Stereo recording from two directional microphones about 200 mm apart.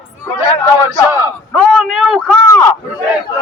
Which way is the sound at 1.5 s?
Centre (ahead or behind).